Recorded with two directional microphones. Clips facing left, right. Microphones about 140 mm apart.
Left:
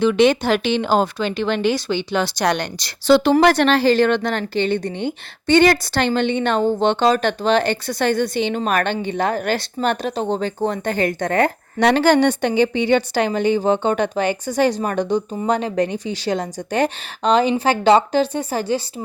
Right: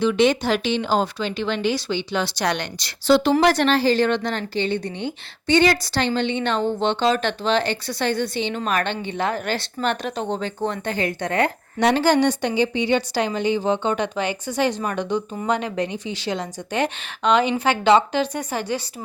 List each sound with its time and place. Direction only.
0.0 s speech: 60° left (ahead or behind); by 2.9 s 40° left (ahead or behind)
3.1 s a woman's voice: 75° left (ahead or behind); by 11.5 s 45° left (ahead or behind)
11.8 s a woman's voice: 70° left (ahead or behind); by 18.8 s 30° left (ahead or behind)